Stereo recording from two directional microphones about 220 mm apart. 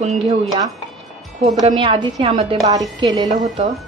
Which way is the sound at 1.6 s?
20° right (ahead or behind).